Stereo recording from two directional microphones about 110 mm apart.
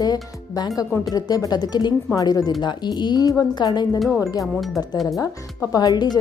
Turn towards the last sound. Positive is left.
turn(degrees=40)  # may be behind; listen again after turning